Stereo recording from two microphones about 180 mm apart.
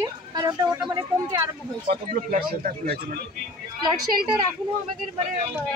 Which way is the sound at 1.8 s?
55° right (ahead or behind).